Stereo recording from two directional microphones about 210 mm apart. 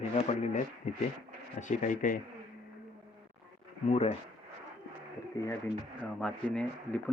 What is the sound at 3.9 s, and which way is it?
Speech, 30° left (ahead or behind).